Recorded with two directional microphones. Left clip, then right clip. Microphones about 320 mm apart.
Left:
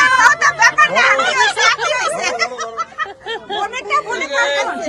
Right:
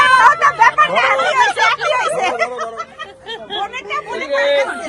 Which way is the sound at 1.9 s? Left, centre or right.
Centre.